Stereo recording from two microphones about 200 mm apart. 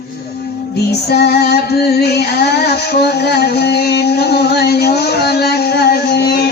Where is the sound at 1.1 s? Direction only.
55° left (ahead or behind).